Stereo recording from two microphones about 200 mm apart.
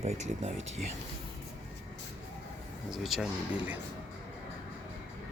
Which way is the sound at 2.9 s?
Centre (ahead or behind).